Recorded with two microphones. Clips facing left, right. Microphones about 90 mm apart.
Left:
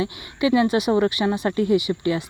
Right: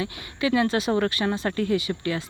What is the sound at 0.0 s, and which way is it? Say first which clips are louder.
Speech: left 4 dB; 20° left (ahead or behind).